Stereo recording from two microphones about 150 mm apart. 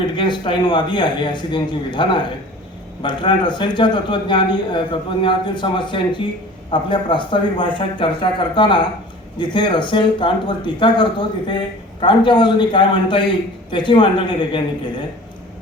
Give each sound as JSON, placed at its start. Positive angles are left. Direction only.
{"t": 0.2, "sound": "speech", "side_deg": 30}